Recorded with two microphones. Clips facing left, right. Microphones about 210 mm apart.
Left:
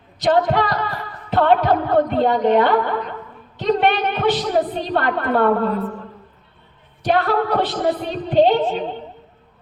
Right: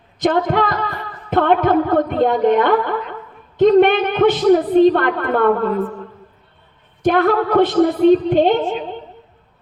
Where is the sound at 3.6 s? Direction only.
50° right (ahead or behind).